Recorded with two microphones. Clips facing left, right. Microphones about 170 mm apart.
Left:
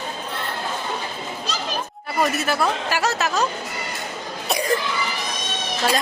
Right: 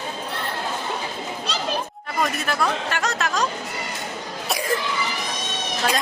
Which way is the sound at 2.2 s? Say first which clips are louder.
Left 3 dB; 5° left (ahead or behind).